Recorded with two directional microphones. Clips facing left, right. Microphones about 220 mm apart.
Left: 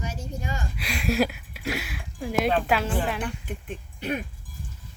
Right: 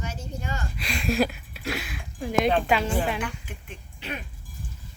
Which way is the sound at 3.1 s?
35° left (ahead or behind).